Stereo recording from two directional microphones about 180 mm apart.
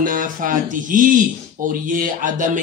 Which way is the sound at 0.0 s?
50° right (ahead or behind).